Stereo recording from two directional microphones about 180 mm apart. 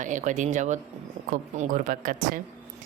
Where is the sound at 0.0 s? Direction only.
45° right (ahead or behind).